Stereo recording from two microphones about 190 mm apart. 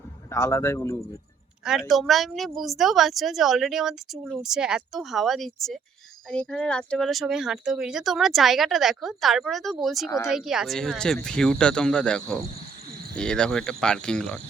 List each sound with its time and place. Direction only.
0.3 s a man's voice: 15° left (ahead or behind)
1.6 s speech: centre (ahead or behind)